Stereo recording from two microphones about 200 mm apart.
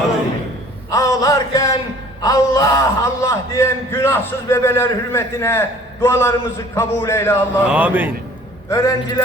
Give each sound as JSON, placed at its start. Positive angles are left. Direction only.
{"t": 0.9, "sound": "a sound", "side_deg": 15}
{"t": 2.2, "sound": "a man's voice", "side_deg": 15}
{"t": 7.7, "sound": "a man's voice", "side_deg": -5}
{"t": 8.7, "sound": "a man's voice", "side_deg": 15}